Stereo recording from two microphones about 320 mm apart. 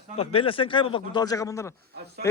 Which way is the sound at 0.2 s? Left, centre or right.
Centre.